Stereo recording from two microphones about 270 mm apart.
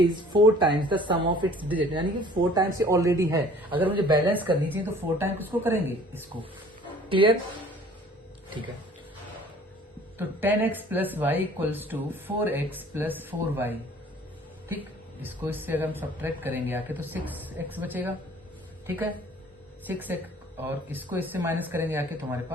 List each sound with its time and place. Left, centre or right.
0.0 s speech: centre
7.1 s speech: centre
10.2 s speech: centre
15.2 s speech: centre
19.9 s speech: centre